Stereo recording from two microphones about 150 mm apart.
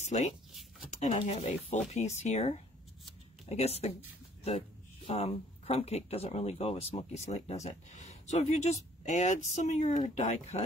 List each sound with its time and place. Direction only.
0.0 s speech: 50° left (ahead or behind)